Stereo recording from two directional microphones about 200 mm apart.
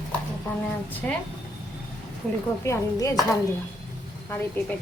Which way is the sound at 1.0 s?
5° left (ahead or behind).